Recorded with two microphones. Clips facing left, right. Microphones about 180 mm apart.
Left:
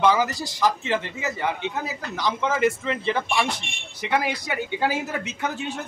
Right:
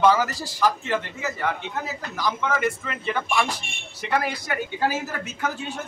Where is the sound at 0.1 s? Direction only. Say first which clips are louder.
Even; 20° left (ahead or behind).